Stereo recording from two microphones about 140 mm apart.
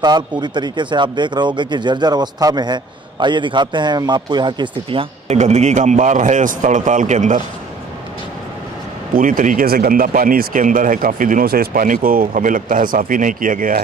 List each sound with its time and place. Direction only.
0.0 s speech: 30° right (ahead or behind)
5.3 s speech: 55° right (ahead or behind)
9.1 s speech: 75° right (ahead or behind)